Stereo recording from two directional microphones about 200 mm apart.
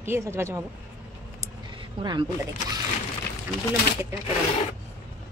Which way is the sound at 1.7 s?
20° right (ahead or behind).